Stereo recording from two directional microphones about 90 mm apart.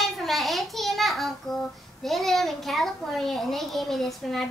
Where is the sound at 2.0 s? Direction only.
Centre (ahead or behind).